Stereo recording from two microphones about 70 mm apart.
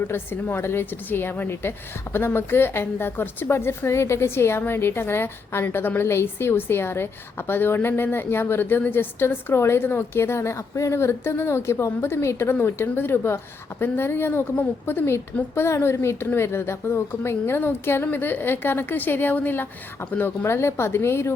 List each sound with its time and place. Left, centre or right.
0.0 s a woman's voice: left